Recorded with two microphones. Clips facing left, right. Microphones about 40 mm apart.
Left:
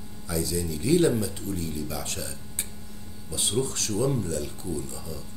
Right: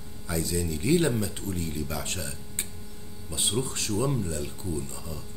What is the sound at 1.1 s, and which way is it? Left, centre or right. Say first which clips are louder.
Speech: left 1 dB; right.